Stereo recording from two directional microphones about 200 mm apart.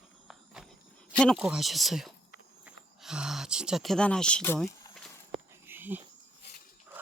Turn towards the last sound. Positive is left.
turn(degrees=-10)  # may be behind; listen again after turning